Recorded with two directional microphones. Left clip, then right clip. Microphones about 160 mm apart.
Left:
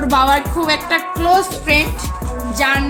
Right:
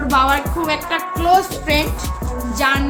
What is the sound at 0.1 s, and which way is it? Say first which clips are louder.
Music: left 2 dB; 65° left (ahead or behind).